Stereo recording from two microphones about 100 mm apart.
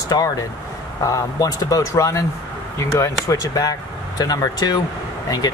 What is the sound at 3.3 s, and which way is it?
Speech, 35° left (ahead or behind).